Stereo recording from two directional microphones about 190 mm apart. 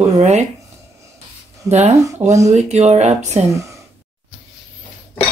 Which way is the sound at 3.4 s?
15° right (ahead or behind).